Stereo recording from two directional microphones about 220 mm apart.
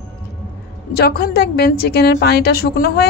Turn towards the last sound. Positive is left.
turn(degrees=45)  # may be behind; listen again after turning